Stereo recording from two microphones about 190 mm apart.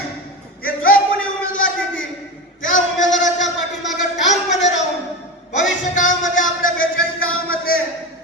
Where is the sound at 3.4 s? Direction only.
70° left (ahead or behind).